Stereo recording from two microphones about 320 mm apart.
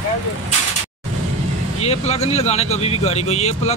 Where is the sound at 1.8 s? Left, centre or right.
Centre.